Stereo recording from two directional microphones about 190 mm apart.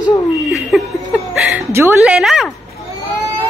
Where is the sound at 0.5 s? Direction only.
Centre (ahead or behind).